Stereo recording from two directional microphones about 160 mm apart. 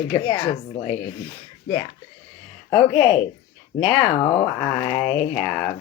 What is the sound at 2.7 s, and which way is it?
Speech, 25° left (ahead or behind).